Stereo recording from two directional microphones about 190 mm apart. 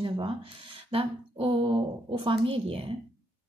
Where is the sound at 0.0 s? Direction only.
25° right (ahead or behind).